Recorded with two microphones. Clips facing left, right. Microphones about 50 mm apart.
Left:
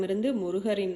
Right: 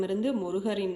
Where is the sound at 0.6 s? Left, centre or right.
Centre.